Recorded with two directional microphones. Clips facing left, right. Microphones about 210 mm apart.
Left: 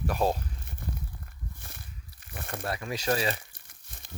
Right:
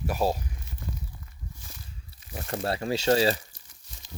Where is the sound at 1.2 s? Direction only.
60° left (ahead or behind).